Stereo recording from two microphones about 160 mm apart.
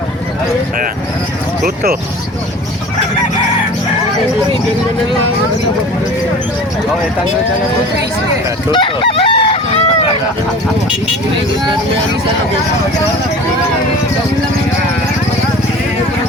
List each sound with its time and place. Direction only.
1.6 s speech: 70° right (ahead or behind)
8.7 s chicken: 30° left (ahead or behind)